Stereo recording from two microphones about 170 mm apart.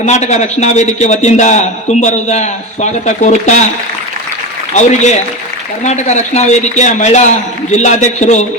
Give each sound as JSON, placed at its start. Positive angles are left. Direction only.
{"t": 0.0, "sound": "a man's voice", "side_deg": 40}
{"t": 4.7, "sound": "a man's voice", "side_deg": 45}